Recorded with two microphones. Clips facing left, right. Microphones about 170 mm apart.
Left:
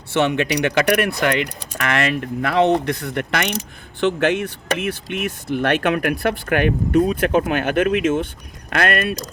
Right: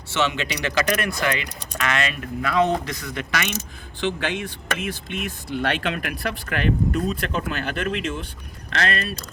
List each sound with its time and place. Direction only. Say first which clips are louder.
0.1 s speech: left 6 dB; 55° left (ahead or behind)
4.2 s speech: left 8 dB; 50° left (ahead or behind)